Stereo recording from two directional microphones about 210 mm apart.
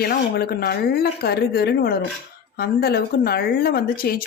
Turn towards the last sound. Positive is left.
turn(degrees=45)  # may be behind; listen again after turning